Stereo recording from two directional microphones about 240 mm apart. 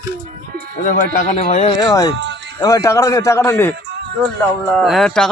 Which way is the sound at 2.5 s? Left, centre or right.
Centre.